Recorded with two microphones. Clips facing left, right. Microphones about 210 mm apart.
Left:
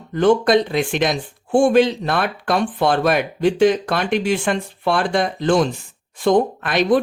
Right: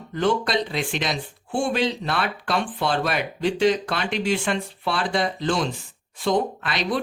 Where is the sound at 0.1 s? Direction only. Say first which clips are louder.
Left 8 dB; 50° left (ahead or behind).